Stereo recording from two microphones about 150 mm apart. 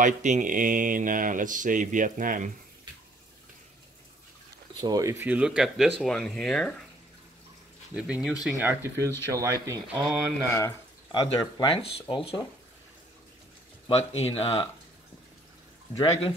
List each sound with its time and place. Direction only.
0.0 s speech: 55° right (ahead or behind)
4.7 s speech: 25° right (ahead or behind); by 6.7 s centre (ahead or behind)
7.9 s speech: 5° right (ahead or behind); by 10.0 s 20° right (ahead or behind)
10.5 s speech: 20° left (ahead or behind)
13.8 s speech: 40° left (ahead or behind)
15.9 s speech: 40° left (ahead or behind)